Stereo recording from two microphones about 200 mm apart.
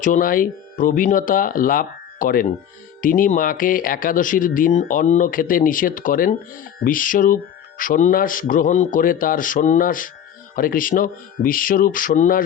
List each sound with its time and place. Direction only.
0.0 s speech: 40° left (ahead or behind)